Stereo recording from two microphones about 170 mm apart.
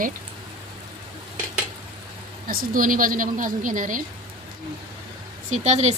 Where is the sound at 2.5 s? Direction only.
55° right (ahead or behind).